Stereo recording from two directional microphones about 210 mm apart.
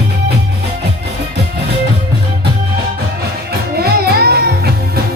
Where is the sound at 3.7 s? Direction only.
50° right (ahead or behind).